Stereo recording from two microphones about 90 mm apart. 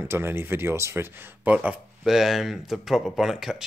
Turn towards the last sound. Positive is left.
turn(degrees=-5)  # may be behind; listen again after turning